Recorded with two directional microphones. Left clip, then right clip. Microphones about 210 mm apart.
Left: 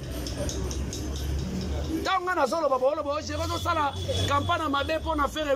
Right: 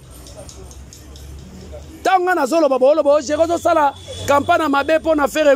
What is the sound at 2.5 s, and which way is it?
Speech, 90° right.